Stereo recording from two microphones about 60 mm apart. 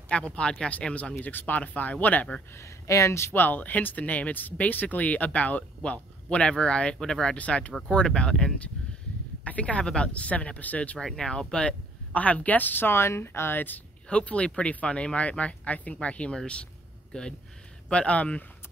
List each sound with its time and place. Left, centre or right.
0.1 s speech: centre
2.5 s speech: left
3.3 s speech: left; by 7.3 s centre
7.3 s speech: left
11.0 s speech: centre; by 13.7 s left
14.0 s speech: centre